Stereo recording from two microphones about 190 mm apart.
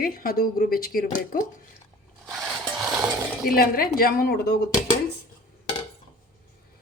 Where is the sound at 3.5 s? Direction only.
50° left (ahead or behind).